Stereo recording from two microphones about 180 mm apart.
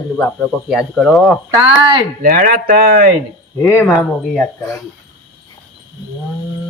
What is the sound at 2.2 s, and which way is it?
Speech, 50° right (ahead or behind).